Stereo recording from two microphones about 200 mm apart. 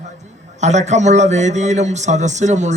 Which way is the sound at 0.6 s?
35° right (ahead or behind).